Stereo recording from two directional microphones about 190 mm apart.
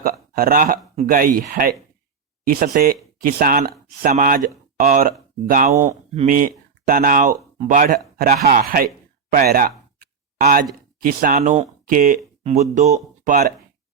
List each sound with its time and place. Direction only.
0.0 s speech: 50° right (ahead or behind)